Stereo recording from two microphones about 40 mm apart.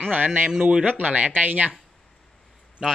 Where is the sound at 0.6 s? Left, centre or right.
Right.